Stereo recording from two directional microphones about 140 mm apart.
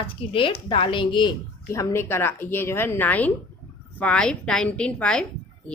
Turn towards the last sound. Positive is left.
turn(degrees=5)  # may be behind; listen again after turning